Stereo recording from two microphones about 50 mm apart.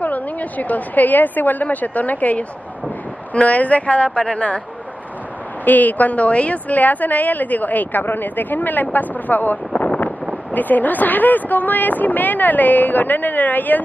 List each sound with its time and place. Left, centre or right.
0.0 s a woman's voice: left
5.7 s a woman's voice: left